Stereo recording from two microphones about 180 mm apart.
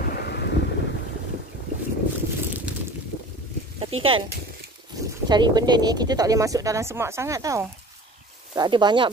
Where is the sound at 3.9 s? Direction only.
30° right (ahead or behind).